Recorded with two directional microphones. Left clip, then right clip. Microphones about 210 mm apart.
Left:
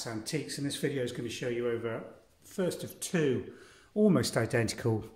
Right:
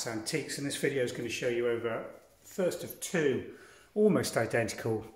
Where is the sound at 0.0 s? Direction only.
15° left (ahead or behind).